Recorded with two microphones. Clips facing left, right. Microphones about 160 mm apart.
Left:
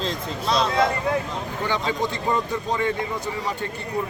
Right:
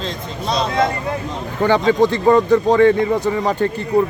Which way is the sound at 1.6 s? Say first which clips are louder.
Right 12 dB; 60° right (ahead or behind).